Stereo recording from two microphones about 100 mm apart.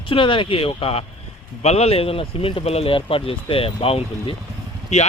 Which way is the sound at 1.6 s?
90° left.